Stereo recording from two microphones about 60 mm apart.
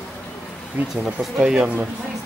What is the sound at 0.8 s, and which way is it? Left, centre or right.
Speech, right.